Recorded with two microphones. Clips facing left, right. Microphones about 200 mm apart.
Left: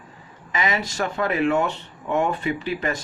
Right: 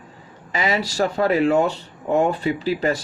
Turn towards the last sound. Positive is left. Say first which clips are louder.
# right 4 dB
turn(degrees=-30)  # may be behind; listen again after turning